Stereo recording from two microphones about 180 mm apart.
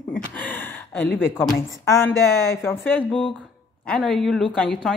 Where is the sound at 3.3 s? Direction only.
5° left (ahead or behind).